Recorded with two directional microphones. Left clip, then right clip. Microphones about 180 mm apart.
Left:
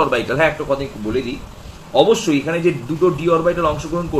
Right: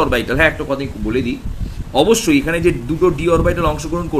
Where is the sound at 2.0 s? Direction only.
65° right (ahead or behind).